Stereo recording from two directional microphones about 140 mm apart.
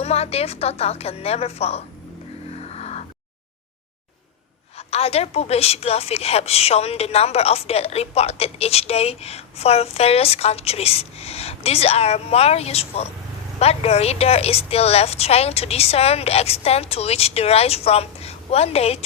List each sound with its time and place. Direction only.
0.0 s a woman's voice: 45° left (ahead or behind)
2.6 s vehicle: 50° left (ahead or behind)
4.9 s a woman's voice: 45° left (ahead or behind)